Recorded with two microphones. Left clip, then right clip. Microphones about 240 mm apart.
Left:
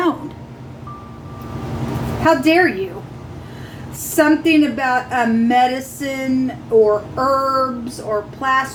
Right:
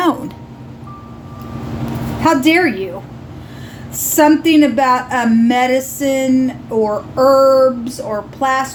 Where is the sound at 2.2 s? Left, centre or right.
Right.